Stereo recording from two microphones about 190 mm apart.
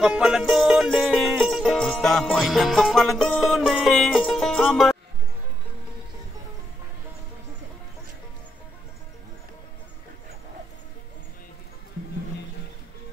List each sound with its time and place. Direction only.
0.0 s music: 5° right (ahead or behind)